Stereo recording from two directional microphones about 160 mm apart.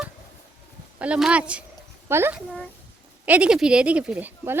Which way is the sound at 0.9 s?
5° right (ahead or behind).